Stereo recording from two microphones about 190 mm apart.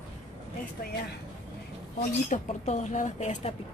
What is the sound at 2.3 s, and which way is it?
Speech, 40° left (ahead or behind).